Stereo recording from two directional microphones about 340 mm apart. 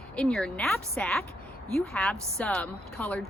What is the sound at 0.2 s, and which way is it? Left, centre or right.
Speech, centre.